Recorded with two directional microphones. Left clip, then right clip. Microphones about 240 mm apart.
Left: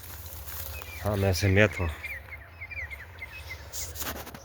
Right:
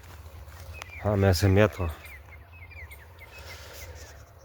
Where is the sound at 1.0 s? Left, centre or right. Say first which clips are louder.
Right 3 dB; right.